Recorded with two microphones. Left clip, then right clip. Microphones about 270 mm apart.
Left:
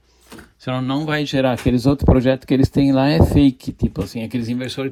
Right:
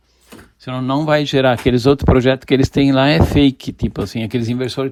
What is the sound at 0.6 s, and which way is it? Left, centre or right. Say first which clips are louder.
Speech: right 4 dB; centre.